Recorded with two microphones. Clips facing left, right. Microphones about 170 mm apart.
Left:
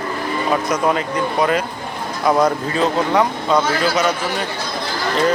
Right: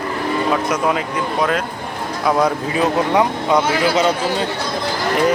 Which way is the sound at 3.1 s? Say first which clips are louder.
Right 1 dB; 15° right (ahead or behind).